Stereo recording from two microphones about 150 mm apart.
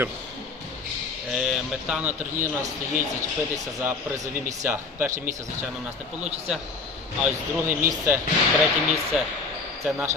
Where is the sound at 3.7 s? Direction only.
15° right (ahead or behind).